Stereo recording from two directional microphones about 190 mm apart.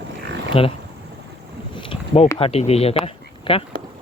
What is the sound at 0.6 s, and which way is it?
Speech, 30° left (ahead or behind).